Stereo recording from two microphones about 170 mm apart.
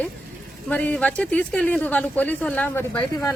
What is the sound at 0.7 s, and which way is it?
Speech, 10° left (ahead or behind).